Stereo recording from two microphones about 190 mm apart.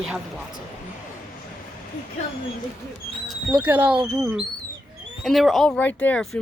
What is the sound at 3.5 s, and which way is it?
Speech, 10° right (ahead or behind).